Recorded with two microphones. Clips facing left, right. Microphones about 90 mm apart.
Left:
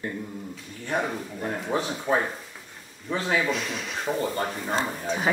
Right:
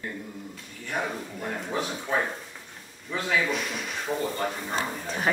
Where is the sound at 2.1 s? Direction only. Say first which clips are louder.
Left 4 dB; 35° left (ahead or behind).